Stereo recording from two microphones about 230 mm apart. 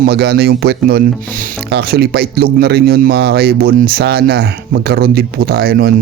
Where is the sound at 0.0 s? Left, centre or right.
Right.